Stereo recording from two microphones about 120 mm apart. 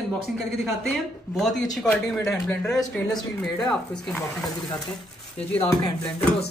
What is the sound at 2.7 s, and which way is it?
Speech, 30° left (ahead or behind).